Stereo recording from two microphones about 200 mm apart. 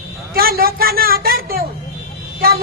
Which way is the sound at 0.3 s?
50° right (ahead or behind).